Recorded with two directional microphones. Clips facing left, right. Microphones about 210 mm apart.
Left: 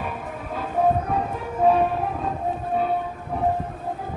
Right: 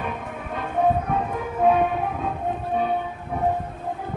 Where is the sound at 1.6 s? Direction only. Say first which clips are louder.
Left 1 dB; centre (ahead or behind).